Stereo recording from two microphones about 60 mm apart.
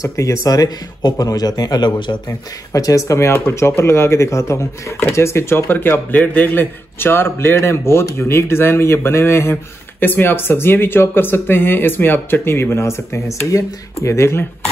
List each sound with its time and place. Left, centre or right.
0.0 s a man's voice: left
2.7 s speech: left